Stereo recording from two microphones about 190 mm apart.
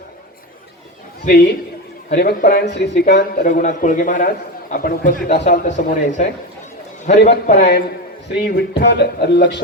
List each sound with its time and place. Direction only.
2.1 s a man's voice: 50° left (ahead or behind)
3.3 s a man's voice: 45° left (ahead or behind)
8.4 s speech: 60° left (ahead or behind)